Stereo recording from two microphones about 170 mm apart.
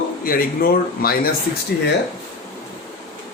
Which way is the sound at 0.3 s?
60° left (ahead or behind).